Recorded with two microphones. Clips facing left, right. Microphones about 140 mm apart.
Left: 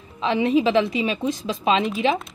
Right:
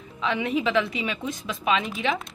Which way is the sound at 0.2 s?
25° left (ahead or behind).